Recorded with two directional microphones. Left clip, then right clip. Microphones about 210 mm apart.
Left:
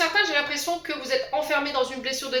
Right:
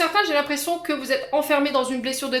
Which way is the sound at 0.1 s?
50° right (ahead or behind).